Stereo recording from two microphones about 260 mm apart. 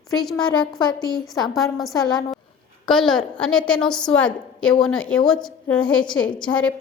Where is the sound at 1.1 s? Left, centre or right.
Centre.